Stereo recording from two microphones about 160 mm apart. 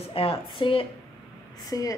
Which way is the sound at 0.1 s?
35° left (ahead or behind).